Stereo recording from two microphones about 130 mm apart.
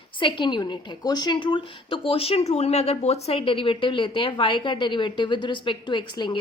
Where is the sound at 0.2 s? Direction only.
40° left (ahead or behind).